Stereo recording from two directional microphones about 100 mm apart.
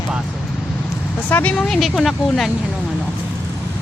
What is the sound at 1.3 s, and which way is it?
Speech, 15° left (ahead or behind).